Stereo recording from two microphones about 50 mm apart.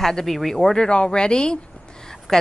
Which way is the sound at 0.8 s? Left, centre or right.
Centre.